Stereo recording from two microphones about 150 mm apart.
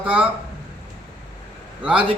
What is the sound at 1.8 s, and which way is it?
Speech, 10° right (ahead or behind).